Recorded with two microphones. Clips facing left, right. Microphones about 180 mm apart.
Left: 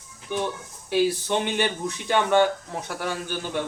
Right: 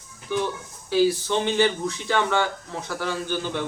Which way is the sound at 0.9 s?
15° left (ahead or behind).